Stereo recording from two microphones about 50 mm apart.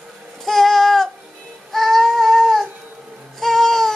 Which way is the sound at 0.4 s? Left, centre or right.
Centre.